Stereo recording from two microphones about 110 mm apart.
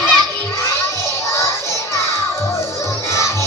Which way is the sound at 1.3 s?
25° left (ahead or behind).